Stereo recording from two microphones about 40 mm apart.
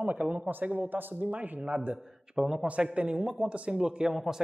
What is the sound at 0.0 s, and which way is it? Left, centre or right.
Speech, right.